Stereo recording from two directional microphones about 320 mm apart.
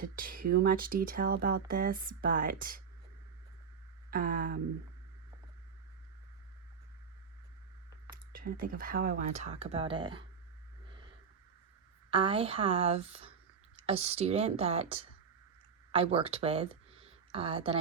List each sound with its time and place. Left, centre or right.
0.0 s speech: right
4.1 s speech: right
8.1 s speech: right
12.1 s a woman's voice: centre